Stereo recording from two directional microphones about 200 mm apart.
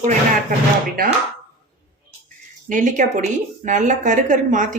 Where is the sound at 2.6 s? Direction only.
40° right (ahead or behind).